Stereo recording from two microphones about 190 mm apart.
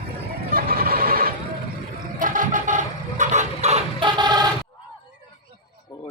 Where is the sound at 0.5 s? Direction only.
50° right (ahead or behind).